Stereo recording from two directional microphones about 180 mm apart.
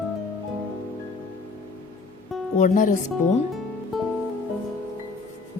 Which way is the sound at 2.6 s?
45° left (ahead or behind).